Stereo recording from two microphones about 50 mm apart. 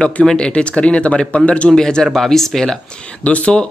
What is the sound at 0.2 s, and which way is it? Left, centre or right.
Speech, centre.